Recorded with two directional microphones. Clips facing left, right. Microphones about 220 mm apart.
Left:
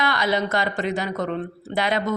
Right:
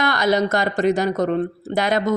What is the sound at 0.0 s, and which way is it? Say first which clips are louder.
Speech: right 4 dB; 45° right (ahead or behind).